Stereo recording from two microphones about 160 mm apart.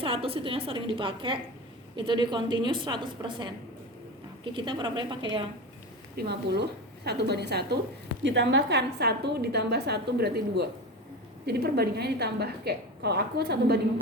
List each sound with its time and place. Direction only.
0.0 s a woman's voice: 35° right (ahead or behind)
4.5 s a woman's voice: 30° right (ahead or behind)
6.1 s a woman's voice: 90° right
11.4 s a woman's voice: 80° right